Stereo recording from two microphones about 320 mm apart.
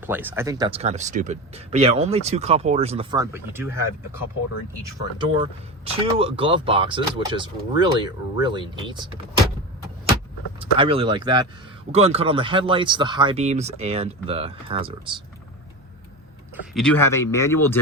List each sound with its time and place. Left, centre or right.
0.0 s speech: centre
10.8 s speech: centre
16.7 s speech: centre